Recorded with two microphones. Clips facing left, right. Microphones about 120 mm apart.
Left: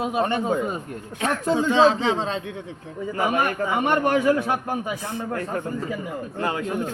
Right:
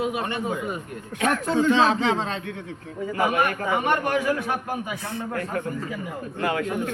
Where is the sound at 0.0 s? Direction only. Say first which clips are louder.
Left 3 dB; 30° left (ahead or behind).